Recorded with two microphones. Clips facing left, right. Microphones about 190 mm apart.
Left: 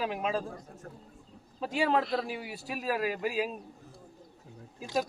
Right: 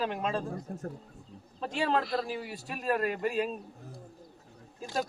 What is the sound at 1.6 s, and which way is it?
A man's voice, 5° left (ahead or behind).